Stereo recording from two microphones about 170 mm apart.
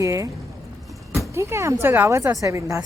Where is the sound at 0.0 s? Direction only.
20° right (ahead or behind).